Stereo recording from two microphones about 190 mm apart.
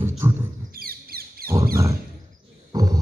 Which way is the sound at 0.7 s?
50° right (ahead or behind).